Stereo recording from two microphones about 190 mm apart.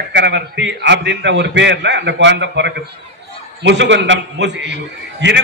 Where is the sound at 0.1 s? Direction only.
65° right (ahead or behind).